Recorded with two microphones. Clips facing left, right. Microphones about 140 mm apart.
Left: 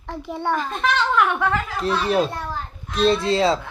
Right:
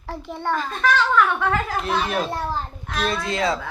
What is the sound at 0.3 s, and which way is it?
Speech, 15° left (ahead or behind).